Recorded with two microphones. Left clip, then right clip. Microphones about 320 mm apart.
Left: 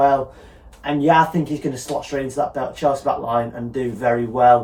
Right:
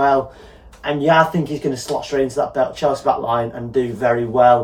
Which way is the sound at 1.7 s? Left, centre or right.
Centre.